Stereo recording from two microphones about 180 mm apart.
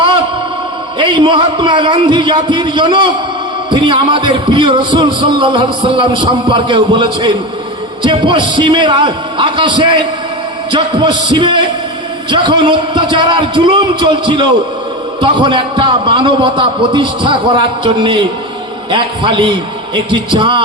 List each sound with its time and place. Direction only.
0.9 s a man's voice: 25° right (ahead or behind)